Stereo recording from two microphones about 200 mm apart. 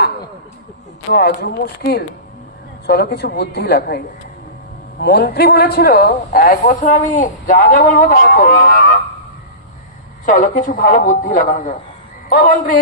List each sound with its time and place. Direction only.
1.1 s a man's voice: 55° left (ahead or behind)
10.2 s a man's voice: 40° left (ahead or behind)